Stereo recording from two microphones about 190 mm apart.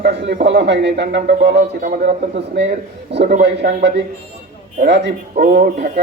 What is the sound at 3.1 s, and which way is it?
A man's voice, 65° right (ahead or behind).